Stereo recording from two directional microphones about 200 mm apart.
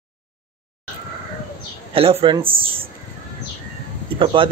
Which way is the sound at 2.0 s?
30° right (ahead or behind).